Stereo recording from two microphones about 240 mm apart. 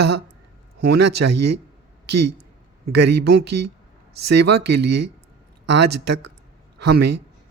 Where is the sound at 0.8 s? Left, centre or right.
Right.